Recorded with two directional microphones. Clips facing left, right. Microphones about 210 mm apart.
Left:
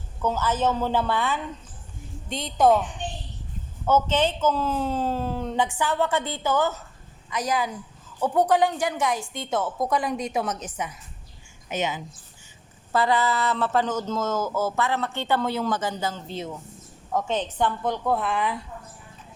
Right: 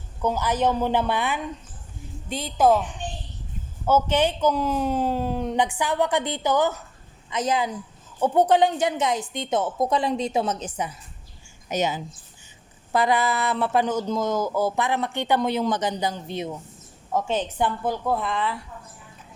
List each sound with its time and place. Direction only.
0.2 s a man's voice: 15° right (ahead or behind)
2.3 s speech: 5° right (ahead or behind)
3.8 s a man's voice: 10° right (ahead or behind); by 12.0 s 40° right (ahead or behind)
12.9 s a man's voice: 15° right (ahead or behind); by 18.6 s 15° left (ahead or behind)